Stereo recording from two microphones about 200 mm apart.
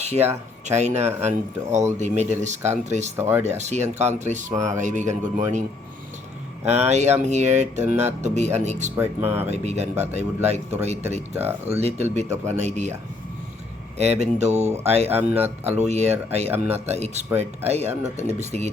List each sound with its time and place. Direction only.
0.0 s speech: 30° right (ahead or behind)
3.2 s speech: 10° right (ahead or behind)
3.6 s speech: 35° right (ahead or behind)
4.5 s speech: 15° right (ahead or behind)
4.8 s speech: 40° right (ahead or behind)
6.8 s speech: 35° right (ahead or behind)
9.0 s speech: 10° right (ahead or behind)
9.5 s speech: 35° right (ahead or behind)
11.3 s speech: 10° right (ahead or behind)
11.7 s speech: 30° right (ahead or behind)
14.0 s speech: 35° right (ahead or behind)
15.1 s speech: 10° right (ahead or behind)
15.7 s speech: 35° right (ahead or behind)